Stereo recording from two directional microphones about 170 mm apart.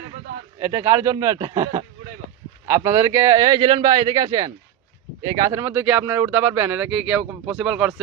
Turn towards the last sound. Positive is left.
turn(degrees=-5)  # may be behind; listen again after turning